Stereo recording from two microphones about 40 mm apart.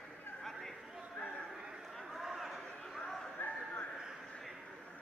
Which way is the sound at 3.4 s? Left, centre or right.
Left.